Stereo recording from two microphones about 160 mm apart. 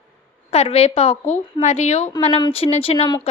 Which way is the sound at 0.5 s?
40° left (ahead or behind).